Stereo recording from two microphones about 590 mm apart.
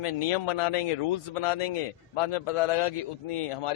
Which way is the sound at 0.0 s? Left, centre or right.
Left.